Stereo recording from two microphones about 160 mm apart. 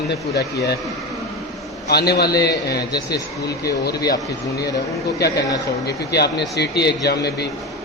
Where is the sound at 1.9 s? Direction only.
80° left.